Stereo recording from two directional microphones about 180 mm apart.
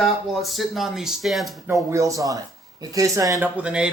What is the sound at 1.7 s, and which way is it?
Speech, 15° right (ahead or behind).